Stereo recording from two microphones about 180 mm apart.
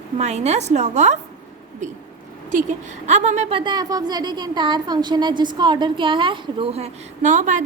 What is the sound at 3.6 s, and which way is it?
A woman's voice, 25° right (ahead or behind).